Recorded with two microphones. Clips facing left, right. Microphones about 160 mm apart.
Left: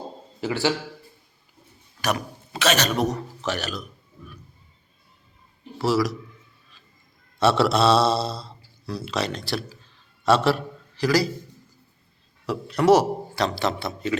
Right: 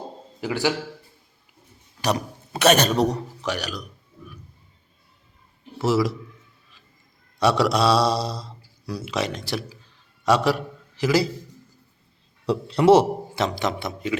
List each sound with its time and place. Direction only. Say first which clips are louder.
0.4 s speech: even; 15° right (ahead or behind)
2.0 s a man's voice: right 2 dB; 35° right (ahead or behind)
3.4 s speech: even; 10° right (ahead or behind)
5.8 s a man's voice: right 1 dB; 25° right (ahead or behind)
7.3 s a man's voice: even; 15° right (ahead or behind)
12.5 s a man's voice: right 2 dB; 25° right (ahead or behind)